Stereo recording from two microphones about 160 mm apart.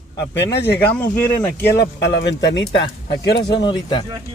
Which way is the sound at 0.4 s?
90° left.